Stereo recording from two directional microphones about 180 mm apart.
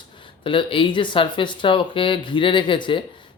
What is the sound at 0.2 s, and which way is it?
Speech, 30° left (ahead or behind).